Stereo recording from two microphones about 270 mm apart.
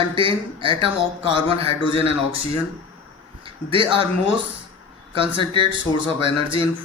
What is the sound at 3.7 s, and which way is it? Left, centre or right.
Speech, centre.